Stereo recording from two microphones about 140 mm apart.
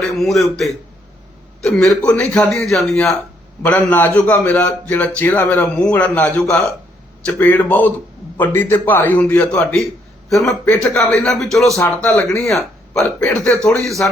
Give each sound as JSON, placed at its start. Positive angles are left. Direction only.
{"t": 0.2, "sound": "a man's voice", "side_deg": 0}
{"t": 12.0, "sound": "a man's voice", "side_deg": 15}
{"t": 12.4, "sound": "speech", "side_deg": 0}